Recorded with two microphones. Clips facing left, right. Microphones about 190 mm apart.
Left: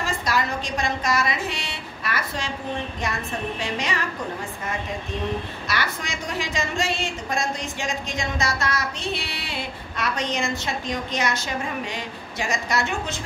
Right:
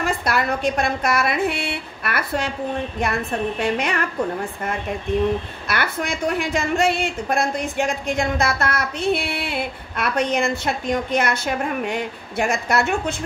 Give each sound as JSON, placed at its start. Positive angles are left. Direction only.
{"t": 0.0, "sound": "a woman's voice", "side_deg": -60}
{"t": 5.7, "sound": "a woman's voice", "side_deg": -60}